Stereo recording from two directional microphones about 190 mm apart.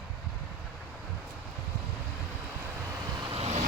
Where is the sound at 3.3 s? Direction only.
35° right (ahead or behind).